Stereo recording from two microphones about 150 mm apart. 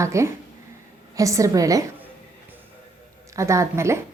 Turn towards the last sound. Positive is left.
turn(degrees=-20)  # may be behind; listen again after turning